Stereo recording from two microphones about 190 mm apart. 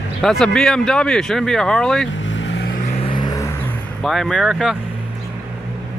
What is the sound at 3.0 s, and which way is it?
Vehicle, 25° left (ahead or behind).